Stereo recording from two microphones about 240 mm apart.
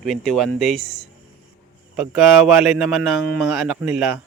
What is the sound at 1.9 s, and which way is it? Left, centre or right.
Speech, centre.